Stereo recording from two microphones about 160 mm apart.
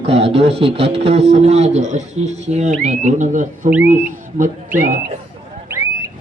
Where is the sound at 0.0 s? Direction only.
40° right (ahead or behind); by 4.9 s 60° right (ahead or behind).